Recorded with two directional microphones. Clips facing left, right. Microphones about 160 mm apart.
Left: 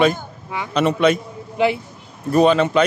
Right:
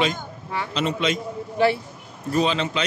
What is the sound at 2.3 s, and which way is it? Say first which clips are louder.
Speech: left 8 dB; 55° left (ahead or behind).